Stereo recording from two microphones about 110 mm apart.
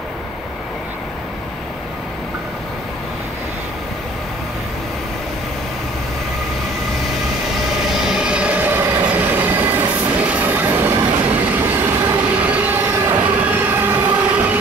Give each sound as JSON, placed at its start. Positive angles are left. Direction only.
{"t": 8.0, "sound": "train", "side_deg": -5}